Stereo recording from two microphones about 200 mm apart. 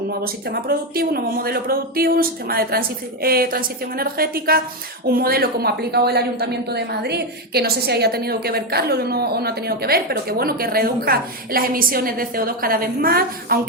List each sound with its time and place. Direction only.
0.2 s a woman's voice: 50° right (ahead or behind)